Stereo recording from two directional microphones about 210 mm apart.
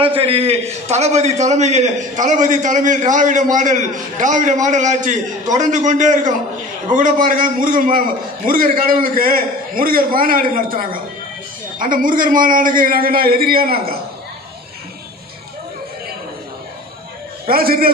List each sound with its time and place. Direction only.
0.0 s a man's voice: 25° right (ahead or behind); by 13.9 s 45° right (ahead or behind)
17.4 s a man's voice: 45° right (ahead or behind)